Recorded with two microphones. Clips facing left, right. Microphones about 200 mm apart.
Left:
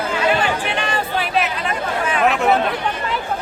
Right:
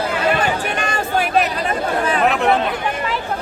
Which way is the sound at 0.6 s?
45° right (ahead or behind).